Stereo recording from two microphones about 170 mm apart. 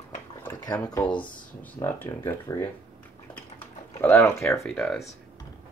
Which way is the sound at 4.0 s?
15° left (ahead or behind).